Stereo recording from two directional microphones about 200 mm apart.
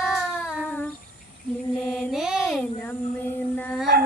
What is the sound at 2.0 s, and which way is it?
Child singing, 5° right (ahead or behind).